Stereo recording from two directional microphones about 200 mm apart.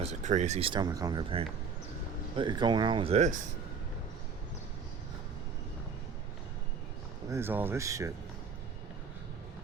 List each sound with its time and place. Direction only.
0.0 s speech: 35° right (ahead or behind)
7.3 s speech: 10° right (ahead or behind)